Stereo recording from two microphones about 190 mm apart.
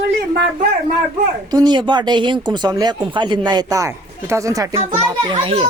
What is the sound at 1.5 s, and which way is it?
Speech, 25° right (ahead or behind).